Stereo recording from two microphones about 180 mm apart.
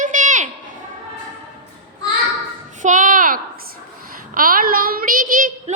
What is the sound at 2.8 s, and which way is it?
A child's voice, 45° right (ahead or behind).